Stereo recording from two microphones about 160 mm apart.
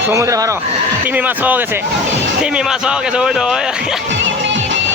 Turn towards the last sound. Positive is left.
turn(degrees=-5)  # may be behind; listen again after turning